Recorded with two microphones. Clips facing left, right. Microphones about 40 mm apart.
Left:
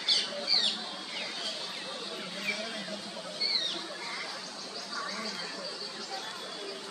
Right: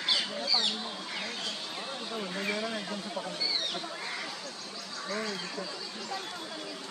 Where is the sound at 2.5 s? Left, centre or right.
Centre.